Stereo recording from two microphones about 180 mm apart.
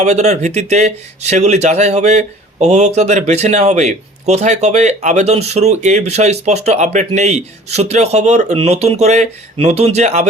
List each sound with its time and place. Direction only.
0.0 s speech: 40° right (ahead or behind)